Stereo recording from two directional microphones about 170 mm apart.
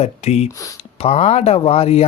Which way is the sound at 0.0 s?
40° left (ahead or behind).